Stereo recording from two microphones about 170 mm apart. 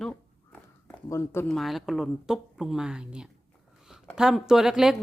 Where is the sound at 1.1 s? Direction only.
15° left (ahead or behind).